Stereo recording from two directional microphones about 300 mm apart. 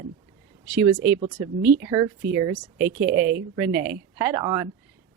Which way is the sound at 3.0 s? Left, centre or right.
Right.